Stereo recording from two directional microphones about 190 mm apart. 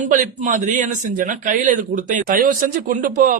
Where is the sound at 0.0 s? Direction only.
40° right (ahead or behind).